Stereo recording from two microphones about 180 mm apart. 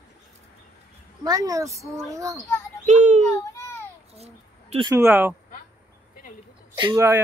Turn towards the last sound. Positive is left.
turn(degrees=-25)  # may be behind; listen again after turning